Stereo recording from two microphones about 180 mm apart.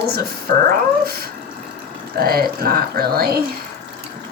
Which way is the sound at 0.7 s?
55° right (ahead or behind).